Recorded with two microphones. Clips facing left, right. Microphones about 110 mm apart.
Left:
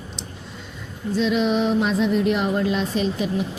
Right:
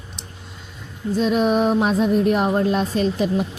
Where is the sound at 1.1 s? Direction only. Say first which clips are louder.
Right 2 dB; 45° right (ahead or behind).